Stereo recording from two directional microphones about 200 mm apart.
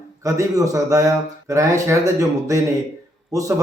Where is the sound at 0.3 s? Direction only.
15° right (ahead or behind).